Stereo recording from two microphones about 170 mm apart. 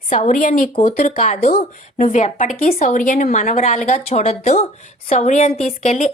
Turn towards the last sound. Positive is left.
turn(degrees=40)  # may be behind; listen again after turning